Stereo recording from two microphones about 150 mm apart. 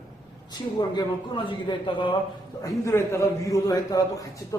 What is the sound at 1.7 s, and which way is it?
Speech, 30° left (ahead or behind).